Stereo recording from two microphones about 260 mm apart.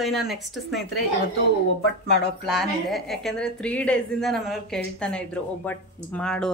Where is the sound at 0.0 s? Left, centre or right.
Centre.